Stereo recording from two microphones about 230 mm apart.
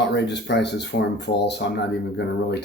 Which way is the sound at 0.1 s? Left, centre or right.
Left.